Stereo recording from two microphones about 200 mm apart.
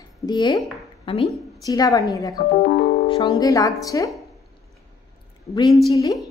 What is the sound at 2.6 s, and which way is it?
Speech, 50° left (ahead or behind).